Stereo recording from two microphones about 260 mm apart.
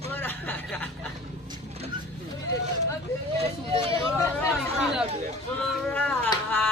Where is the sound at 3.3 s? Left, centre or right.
Right.